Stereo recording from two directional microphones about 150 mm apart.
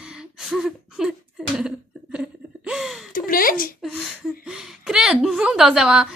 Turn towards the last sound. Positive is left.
turn(degrees=-5)  # may be behind; listen again after turning